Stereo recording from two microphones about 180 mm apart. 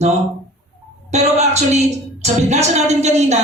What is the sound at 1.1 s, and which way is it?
A woman's voice, 40° right (ahead or behind).